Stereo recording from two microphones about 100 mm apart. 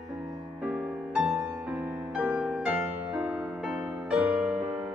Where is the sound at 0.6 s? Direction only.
15° right (ahead or behind).